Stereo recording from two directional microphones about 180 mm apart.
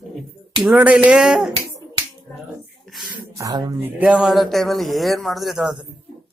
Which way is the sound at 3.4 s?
20° right (ahead or behind).